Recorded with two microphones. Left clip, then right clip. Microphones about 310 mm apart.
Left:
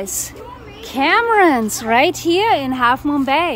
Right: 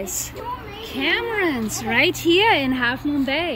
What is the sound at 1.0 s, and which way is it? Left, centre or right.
Speech, left.